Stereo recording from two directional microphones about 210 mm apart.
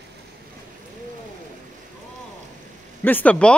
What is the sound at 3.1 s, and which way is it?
Speech, 10° left (ahead or behind).